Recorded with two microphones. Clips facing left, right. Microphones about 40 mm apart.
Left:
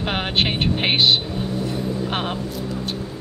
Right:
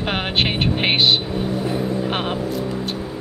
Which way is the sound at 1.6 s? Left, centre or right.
Centre.